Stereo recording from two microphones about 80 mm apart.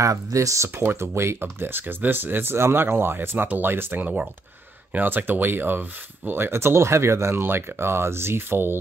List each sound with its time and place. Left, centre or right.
0.0 s speech: right
0.7 s speech: right